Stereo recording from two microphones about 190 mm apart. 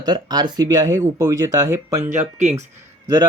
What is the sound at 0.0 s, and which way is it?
Speech, 20° right (ahead or behind).